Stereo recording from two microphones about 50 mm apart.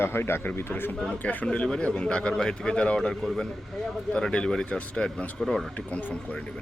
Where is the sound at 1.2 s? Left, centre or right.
Left.